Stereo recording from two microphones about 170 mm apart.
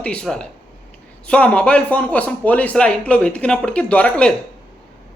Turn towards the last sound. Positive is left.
turn(degrees=5)  # may be behind; listen again after turning